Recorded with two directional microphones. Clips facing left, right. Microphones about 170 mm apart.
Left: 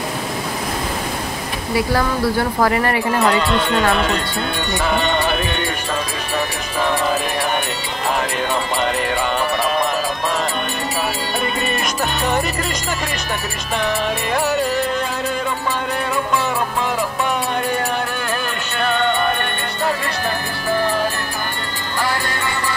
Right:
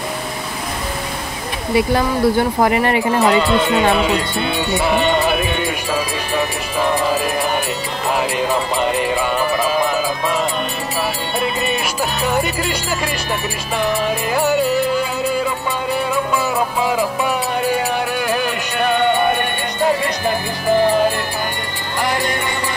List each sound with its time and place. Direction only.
1.7 s speech: 20° right (ahead or behind)
3.2 s music: 5° right (ahead or behind)
8.2 s music: 5° right (ahead or behind)
11.4 s music: centre (ahead or behind)
13.8 s music: 5° right (ahead or behind)
18.3 s music: 10° right (ahead or behind)